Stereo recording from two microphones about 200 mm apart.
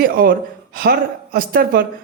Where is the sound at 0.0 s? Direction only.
50° right (ahead or behind).